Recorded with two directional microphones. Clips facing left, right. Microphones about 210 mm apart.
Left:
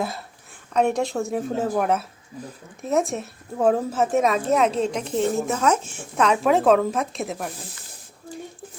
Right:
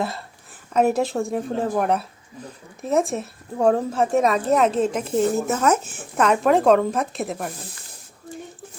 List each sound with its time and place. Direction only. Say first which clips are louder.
0.7 s a woman's voice: right 2 dB; 5° right (ahead or behind)